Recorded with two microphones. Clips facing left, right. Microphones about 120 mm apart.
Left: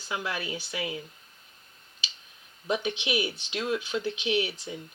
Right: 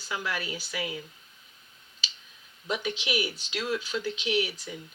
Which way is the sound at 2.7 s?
25° left (ahead or behind).